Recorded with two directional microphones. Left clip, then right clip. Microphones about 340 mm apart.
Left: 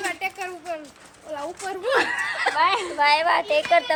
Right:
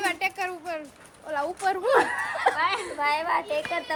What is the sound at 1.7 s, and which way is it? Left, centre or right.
Speech, centre.